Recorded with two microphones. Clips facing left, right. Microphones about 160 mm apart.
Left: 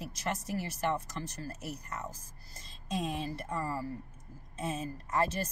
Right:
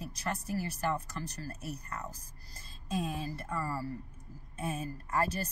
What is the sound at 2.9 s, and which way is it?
Speech, 25° left (ahead or behind).